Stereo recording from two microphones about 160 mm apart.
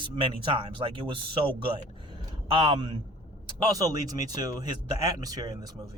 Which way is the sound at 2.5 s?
30° right (ahead or behind).